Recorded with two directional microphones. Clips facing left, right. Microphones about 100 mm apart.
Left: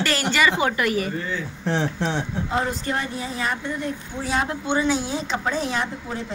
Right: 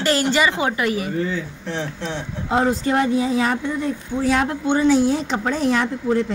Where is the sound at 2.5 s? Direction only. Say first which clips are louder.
Right 7 dB; 80° right.